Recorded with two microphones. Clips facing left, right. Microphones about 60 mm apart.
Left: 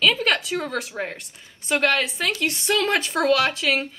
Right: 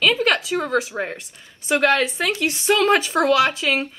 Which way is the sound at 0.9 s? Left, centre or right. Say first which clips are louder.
Right 3 dB; right.